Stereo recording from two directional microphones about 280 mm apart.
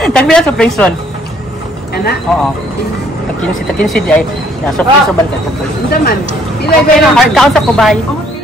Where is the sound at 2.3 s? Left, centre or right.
Centre.